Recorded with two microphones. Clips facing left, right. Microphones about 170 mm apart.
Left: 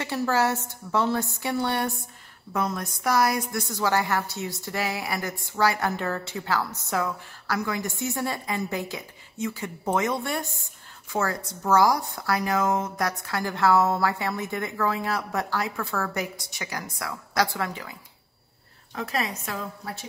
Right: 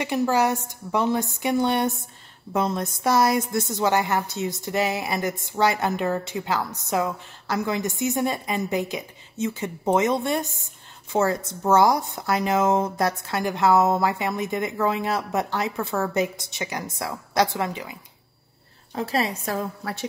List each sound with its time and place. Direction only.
0.0 s a woman's voice: 15° right (ahead or behind)
18.9 s a woman's voice: 30° right (ahead or behind)
19.8 s speech: 75° right (ahead or behind)